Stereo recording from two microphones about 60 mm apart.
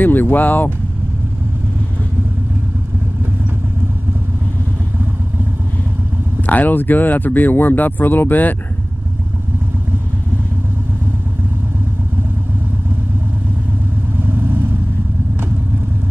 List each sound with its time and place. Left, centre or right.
0.0 s speech: left
6.4 s speech: left
14.2 s vehicle: right